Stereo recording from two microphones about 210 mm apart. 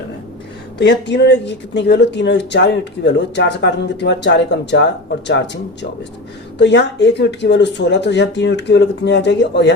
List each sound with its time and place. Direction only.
0.8 s speech: 55° left (ahead or behind)
6.6 s speech: 55° left (ahead or behind)